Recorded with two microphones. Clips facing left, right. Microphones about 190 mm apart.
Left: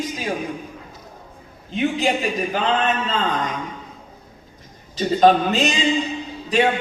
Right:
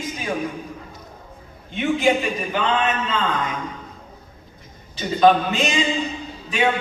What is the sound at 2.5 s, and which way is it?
Speech, 35° left (ahead or behind).